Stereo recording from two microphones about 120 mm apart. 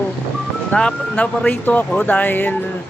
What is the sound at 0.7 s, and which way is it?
Speech, 10° left (ahead or behind).